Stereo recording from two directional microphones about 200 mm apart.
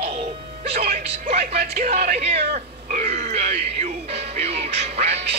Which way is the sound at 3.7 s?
30° right (ahead or behind).